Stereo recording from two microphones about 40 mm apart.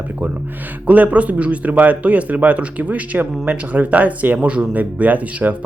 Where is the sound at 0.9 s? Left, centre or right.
Right.